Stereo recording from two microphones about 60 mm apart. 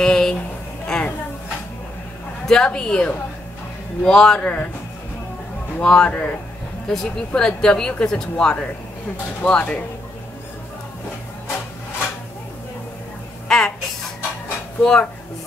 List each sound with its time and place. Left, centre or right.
0.0 s a sound: centre
2.4 s a woman's voice: centre
4.4 s speech: left
5.8 s a woman's voice: centre
13.5 s a sound: centre
14.8 s a woman's voice: centre